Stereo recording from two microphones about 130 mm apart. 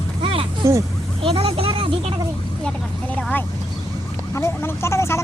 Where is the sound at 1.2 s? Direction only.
45° right (ahead or behind).